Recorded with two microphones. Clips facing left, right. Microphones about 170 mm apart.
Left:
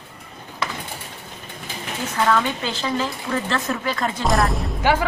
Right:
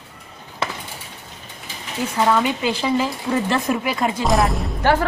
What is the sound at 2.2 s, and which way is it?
Speech, 15° right (ahead or behind).